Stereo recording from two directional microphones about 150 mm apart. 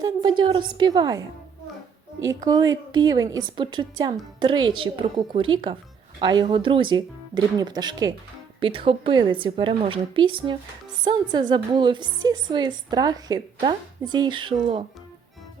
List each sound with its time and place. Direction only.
0.0 s a woman's voice: 30° right (ahead or behind)
2.2 s a woman's voice: 25° right (ahead or behind)
8.6 s a woman's voice: 35° right (ahead or behind)